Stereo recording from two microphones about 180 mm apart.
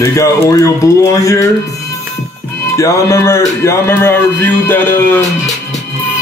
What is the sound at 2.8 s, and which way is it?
Speech, 15° left (ahead or behind).